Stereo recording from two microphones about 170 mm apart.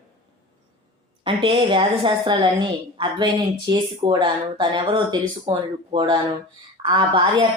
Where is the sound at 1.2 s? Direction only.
30° right (ahead or behind).